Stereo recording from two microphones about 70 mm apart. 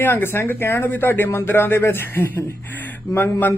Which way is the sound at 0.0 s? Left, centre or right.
Left.